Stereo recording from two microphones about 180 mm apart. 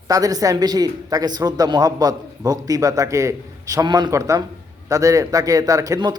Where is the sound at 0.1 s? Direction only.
20° right (ahead or behind).